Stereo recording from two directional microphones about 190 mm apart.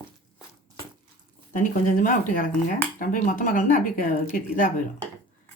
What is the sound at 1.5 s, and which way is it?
Speech, 45° left (ahead or behind).